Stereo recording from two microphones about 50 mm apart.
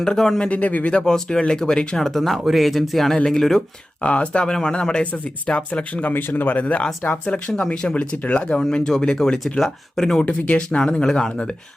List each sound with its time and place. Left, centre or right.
0.0 s speech: centre
0.4 s speech: left
0.9 s speech: centre
4.0 s speech: left
7.3 s speech: centre
10.2 s speech: left